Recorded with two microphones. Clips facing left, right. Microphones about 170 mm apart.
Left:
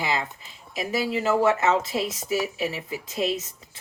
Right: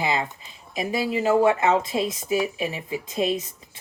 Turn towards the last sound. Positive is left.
turn(degrees=-15)  # may be behind; listen again after turning